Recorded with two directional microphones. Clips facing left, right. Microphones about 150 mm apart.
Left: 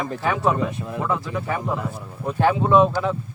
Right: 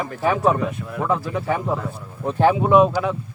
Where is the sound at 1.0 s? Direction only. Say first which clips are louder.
Right 4 dB; 10° right (ahead or behind).